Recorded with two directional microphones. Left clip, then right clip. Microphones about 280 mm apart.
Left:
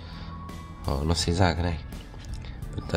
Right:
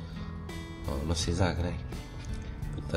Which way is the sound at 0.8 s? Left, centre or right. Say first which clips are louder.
Left 6 dB; centre.